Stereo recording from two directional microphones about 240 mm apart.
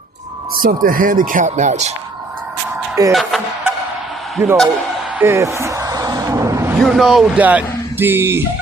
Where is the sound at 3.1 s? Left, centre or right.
Centre.